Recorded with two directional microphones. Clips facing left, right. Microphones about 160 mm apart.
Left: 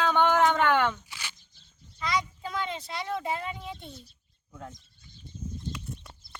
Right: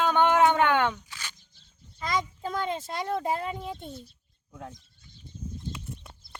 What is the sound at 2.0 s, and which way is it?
Speech, 45° right (ahead or behind).